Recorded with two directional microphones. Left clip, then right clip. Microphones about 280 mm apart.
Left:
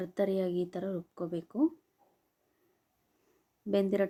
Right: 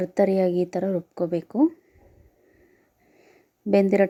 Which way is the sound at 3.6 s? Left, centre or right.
Centre.